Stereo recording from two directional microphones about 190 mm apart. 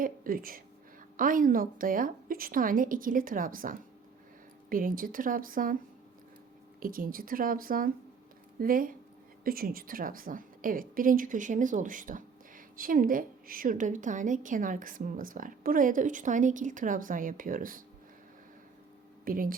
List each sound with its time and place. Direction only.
0.0 s a woman's voice: 50° right (ahead or behind)
6.7 s a woman's voice: 45° right (ahead or behind)
19.2 s a woman's voice: 45° right (ahead or behind)